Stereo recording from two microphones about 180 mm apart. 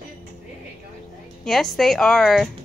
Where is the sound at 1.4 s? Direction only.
Centre (ahead or behind).